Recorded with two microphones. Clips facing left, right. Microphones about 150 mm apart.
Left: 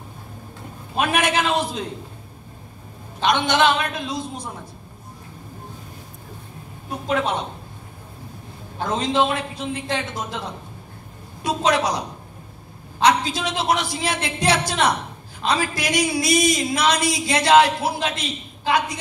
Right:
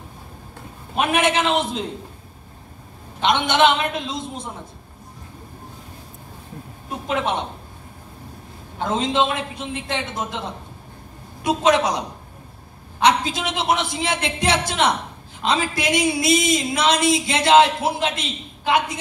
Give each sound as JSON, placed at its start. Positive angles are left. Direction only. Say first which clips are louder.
{"t": 0.9, "sound": "speech", "louder": "right 1 dB", "side_deg": -20}
{"t": 3.2, "sound": "speech", "louder": "right 1 dB", "side_deg": -20}
{"t": 6.9, "sound": "speech", "louder": "left 1 dB", "side_deg": -20}
{"t": 8.7, "sound": "speech", "louder": "even", "side_deg": -20}
{"t": 11.4, "sound": "speech", "louder": "right 2 dB", "side_deg": -20}
{"t": 13.0, "sound": "speech", "louder": "even", "side_deg": -20}